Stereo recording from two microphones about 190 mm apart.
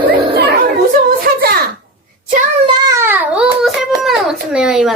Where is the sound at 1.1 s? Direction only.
50° right (ahead or behind).